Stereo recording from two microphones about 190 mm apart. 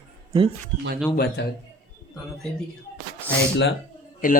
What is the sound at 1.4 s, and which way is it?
Speech, 65° left (ahead or behind).